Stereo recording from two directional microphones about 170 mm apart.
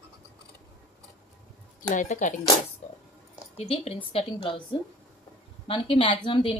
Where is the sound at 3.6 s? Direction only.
40° left (ahead or behind).